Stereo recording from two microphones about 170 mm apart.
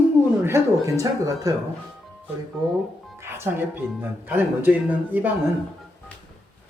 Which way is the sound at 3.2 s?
15° right (ahead or behind).